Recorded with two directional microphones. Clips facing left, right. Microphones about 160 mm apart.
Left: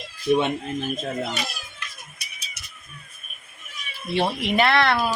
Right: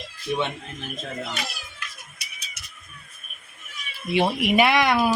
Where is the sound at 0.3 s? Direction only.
40° left (ahead or behind).